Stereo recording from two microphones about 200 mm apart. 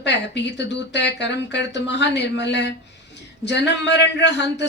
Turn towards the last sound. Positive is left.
turn(degrees=60)  # may be behind; listen again after turning